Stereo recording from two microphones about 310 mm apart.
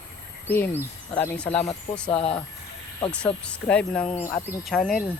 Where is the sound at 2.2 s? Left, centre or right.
Centre.